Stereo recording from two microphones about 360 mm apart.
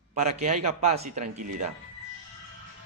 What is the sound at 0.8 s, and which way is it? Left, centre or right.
Speech, centre.